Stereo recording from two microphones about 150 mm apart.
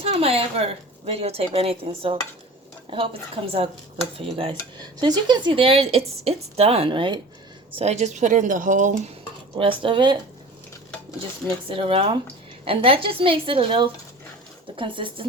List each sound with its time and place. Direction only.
0.0 s speech: 40° right (ahead or behind)
7.8 s speech: 50° right (ahead or behind)
9.6 s speech: 35° right (ahead or behind)
11.7 s speech: 40° right (ahead or behind)